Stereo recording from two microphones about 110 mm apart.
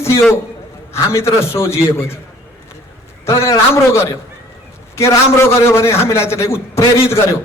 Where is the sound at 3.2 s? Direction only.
25° left (ahead or behind).